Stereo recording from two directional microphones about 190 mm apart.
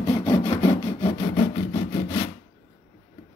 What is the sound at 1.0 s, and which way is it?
Sawing, 30° left (ahead or behind).